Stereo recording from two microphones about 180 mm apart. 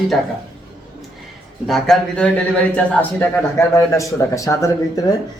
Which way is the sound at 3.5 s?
15° left (ahead or behind).